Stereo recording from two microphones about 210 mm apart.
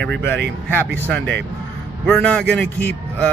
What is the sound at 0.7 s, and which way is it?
Mantra, 10° left (ahead or behind).